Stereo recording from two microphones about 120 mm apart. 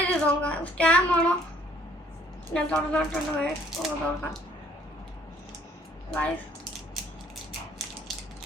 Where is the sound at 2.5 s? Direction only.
10° left (ahead or behind).